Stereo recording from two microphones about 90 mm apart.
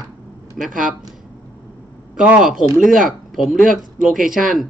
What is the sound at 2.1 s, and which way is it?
A man's voice, 10° right (ahead or behind).